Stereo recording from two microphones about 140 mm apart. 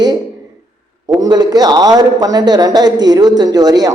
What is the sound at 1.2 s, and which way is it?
A man's voice, 30° right (ahead or behind).